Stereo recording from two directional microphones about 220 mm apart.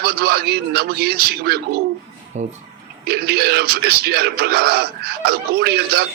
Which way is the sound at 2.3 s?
30° right (ahead or behind).